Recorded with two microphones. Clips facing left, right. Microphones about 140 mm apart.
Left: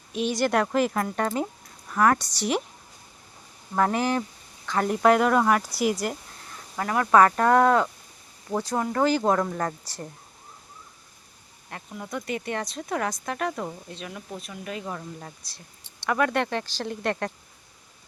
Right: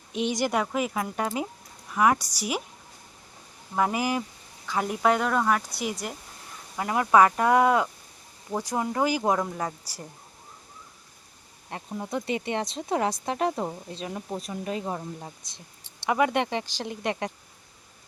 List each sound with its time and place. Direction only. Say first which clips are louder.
0.1 s speech: left 2 dB; 15° right (ahead or behind)
0.5 s speech: left 4 dB; 5° right (ahead or behind)
3.8 s speech: left 2 dB; 10° right (ahead or behind)
6.7 s speech: left 1 dB; 20° right (ahead or behind)
11.7 s speech: right 3 dB; 30° right (ahead or behind)
15.2 s speech: right 1 dB; 20° right (ahead or behind)